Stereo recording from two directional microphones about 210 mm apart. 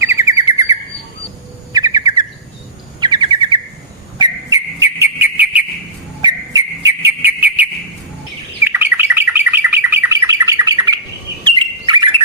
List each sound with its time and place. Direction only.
0.0 s bird: 15° right (ahead or behind)
4.5 s whistle: 15° right (ahead or behind)
8.6 s bird: 10° right (ahead or behind)